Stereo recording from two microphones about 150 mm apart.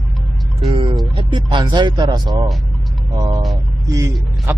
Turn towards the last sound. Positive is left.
turn(degrees=-15)  # may be behind; listen again after turning